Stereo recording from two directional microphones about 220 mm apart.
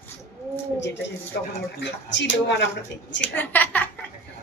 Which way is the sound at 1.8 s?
55° left (ahead or behind).